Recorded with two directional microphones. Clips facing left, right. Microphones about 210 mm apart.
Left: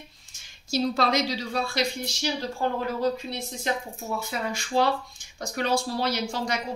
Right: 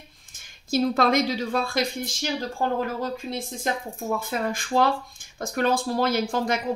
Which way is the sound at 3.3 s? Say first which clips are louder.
Right 1 dB; 50° right (ahead or behind).